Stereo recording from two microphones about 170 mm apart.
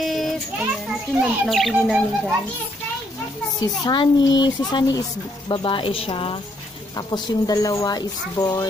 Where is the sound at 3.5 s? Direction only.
25° left (ahead or behind).